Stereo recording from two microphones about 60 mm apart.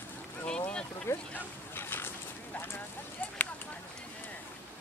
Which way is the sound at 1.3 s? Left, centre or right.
Left.